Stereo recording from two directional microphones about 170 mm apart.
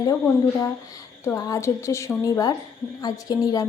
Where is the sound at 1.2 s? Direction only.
20° left (ahead or behind).